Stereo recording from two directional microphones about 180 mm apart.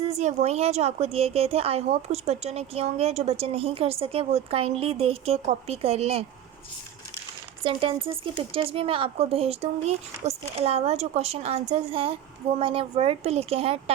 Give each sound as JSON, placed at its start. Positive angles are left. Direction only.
{"t": 0.1, "sound": "a woman's voice", "side_deg": -40}
{"t": 7.6, "sound": "a woman's voice", "side_deg": -30}